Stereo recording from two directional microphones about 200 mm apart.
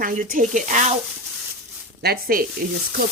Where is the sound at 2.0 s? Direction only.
50° right (ahead or behind).